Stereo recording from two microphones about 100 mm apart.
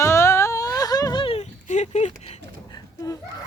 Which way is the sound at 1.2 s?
85° left.